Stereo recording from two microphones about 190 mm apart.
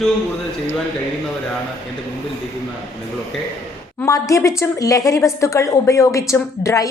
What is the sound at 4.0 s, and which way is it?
A woman's voice, 15° left (ahead or behind).